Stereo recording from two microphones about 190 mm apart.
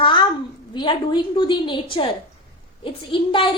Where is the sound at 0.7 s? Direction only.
25° left (ahead or behind).